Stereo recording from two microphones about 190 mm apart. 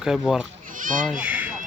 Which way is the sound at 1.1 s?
5° right (ahead or behind).